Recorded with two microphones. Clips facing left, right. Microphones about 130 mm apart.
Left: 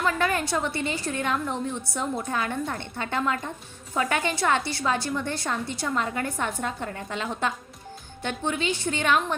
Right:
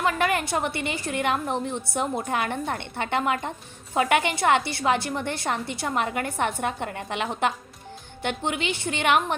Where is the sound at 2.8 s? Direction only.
20° right (ahead or behind).